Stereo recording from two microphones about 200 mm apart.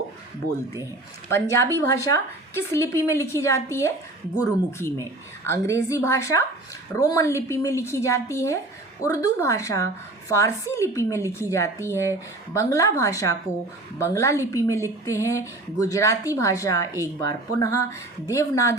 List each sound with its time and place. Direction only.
1.3 s speech: 15° left (ahead or behind)